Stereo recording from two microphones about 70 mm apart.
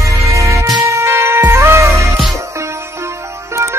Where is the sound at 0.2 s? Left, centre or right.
Right.